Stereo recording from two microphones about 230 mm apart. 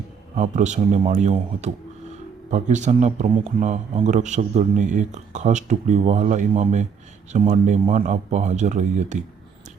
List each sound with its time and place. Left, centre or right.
0.3 s speech: right